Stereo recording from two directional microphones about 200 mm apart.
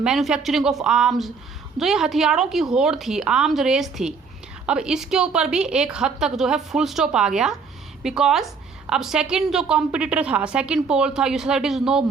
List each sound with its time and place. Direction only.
0.0 s a woman's voice: centre (ahead or behind)